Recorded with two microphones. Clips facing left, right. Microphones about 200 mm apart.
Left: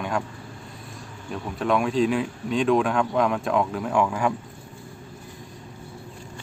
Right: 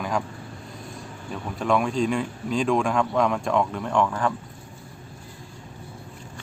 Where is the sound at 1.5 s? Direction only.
Centre (ahead or behind).